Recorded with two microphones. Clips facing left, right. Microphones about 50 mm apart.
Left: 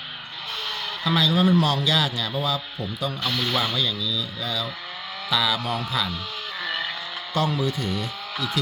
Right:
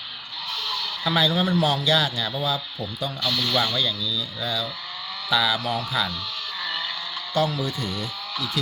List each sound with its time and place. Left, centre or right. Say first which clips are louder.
1.0 s a man's voice: left 1 dB; centre
3.2 s speech: right 2 dB; centre
3.8 s a man's voice: even; centre
6.6 s vehicle: left 2 dB; centre
7.3 s a man's voice: even; centre